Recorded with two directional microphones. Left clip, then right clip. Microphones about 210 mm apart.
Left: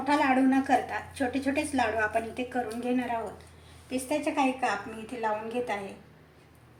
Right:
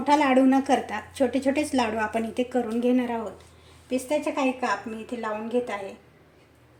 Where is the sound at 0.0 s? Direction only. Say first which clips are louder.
Right 5 dB; 50° right (ahead or behind).